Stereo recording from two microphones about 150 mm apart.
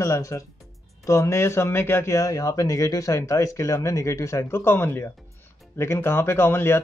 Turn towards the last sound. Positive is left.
turn(degrees=15)  # may be behind; listen again after turning